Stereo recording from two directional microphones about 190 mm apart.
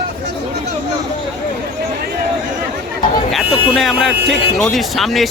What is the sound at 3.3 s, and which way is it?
Speech, centre (ahead or behind).